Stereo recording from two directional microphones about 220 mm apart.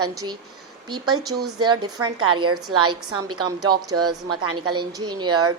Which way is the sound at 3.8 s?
90° right.